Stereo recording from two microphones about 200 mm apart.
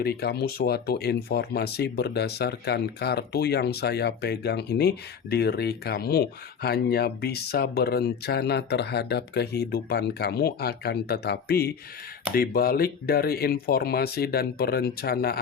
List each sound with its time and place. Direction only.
0.0 s speech: 50° left (ahead or behind)